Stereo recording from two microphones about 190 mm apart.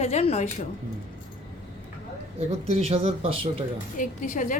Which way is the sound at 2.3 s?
30° right (ahead or behind).